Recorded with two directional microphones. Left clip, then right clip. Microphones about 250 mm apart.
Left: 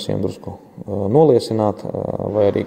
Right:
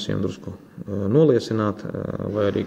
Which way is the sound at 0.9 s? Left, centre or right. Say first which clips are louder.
Left 5 dB; left.